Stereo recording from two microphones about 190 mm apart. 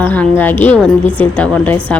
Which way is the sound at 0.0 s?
10° left (ahead or behind).